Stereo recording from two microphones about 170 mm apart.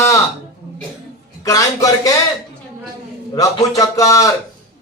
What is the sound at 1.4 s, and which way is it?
Speech, 20° left (ahead or behind).